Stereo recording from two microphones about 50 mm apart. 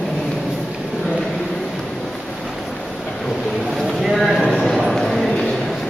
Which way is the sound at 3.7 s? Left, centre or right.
Centre.